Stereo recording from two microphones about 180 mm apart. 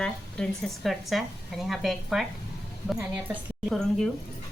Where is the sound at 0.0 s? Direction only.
5° left (ahead or behind).